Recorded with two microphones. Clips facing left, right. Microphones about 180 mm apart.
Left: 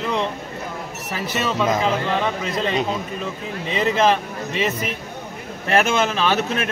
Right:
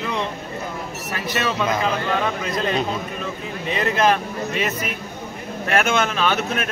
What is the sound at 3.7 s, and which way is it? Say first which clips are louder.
Speech: left 1 dB; centre (ahead or behind).